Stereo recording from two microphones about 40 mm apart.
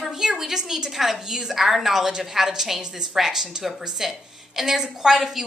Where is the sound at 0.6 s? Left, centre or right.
Centre.